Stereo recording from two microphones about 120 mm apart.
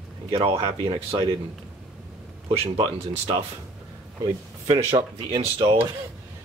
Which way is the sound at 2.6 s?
45° right (ahead or behind).